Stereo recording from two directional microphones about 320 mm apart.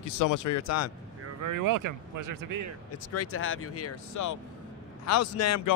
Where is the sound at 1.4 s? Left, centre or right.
Right.